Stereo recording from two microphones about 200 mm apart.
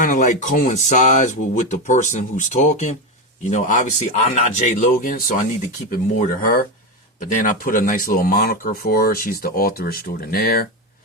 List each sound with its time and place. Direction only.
0.0 s speech: 40° left (ahead or behind)